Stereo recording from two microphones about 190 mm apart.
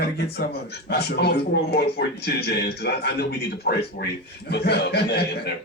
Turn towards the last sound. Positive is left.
turn(degrees=60)  # may be behind; listen again after turning